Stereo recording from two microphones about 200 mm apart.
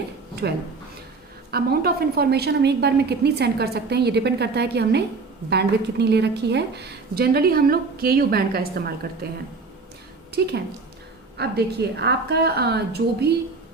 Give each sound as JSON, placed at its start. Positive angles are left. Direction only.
{"t": 0.4, "sound": "a woman's voice", "side_deg": -55}